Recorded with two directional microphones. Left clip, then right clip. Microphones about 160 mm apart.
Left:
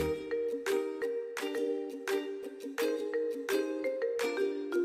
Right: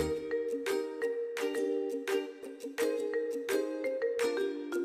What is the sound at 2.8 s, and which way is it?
Music, 5° right (ahead or behind).